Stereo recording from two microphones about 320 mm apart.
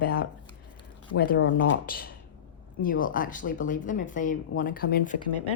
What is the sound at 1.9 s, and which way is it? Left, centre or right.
Speech, left.